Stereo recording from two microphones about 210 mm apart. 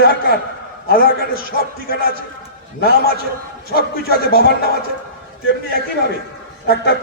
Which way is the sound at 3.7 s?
45° left (ahead or behind).